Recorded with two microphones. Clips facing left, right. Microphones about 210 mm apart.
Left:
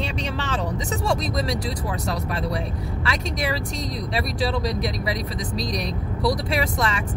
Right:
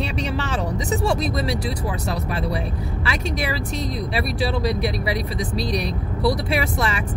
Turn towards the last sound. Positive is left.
turn(degrees=-5)  # may be behind; listen again after turning